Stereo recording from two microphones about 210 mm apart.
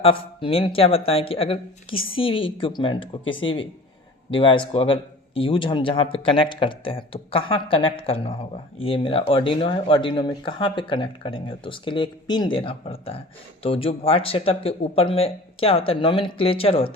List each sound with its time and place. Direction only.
0.0 s speech: 25° left (ahead or behind)